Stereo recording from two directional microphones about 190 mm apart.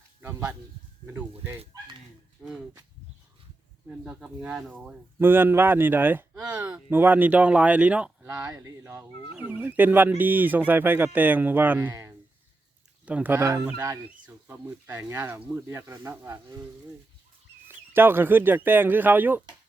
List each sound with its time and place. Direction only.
0.2 s a sound: 10° right (ahead or behind)
1.0 s speech: 15° right (ahead or behind)
2.4 s a sound: 5° right (ahead or behind)
3.8 s speech: 5° right (ahead or behind)
8.3 s speech: 15° right (ahead or behind)
17.7 s speech: 10° right (ahead or behind)